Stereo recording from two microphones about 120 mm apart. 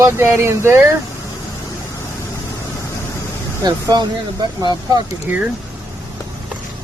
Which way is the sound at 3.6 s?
35° right (ahead or behind).